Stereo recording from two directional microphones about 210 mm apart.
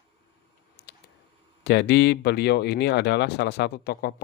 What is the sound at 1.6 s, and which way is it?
Speech, 50° left (ahead or behind).